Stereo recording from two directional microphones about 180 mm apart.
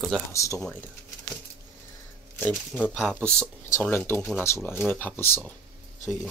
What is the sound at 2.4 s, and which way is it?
Speech, 5° left (ahead or behind).